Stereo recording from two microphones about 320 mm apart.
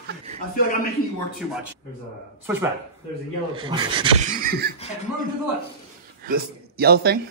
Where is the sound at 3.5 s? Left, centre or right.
Centre.